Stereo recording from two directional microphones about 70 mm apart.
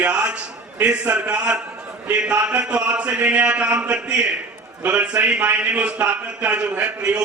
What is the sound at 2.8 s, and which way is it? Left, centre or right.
Speech, right.